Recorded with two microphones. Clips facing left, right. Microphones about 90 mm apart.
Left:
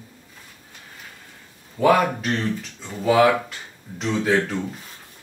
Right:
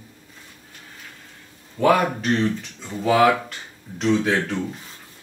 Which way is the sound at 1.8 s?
Centre (ahead or behind).